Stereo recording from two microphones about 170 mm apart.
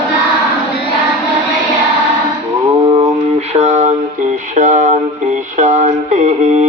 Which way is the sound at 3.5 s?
40° right (ahead or behind).